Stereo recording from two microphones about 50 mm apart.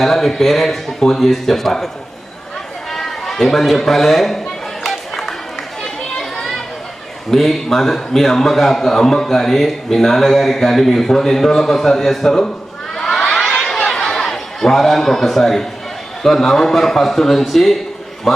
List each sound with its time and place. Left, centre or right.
0.0 s speech: centre
2.9 s speech: centre
4.8 s music: centre
5.8 s children playing: centre
7.3 s a man's voice: centre
13.0 s crowd: centre
13.5 s a sound: centre
16.2 s a man's voice: centre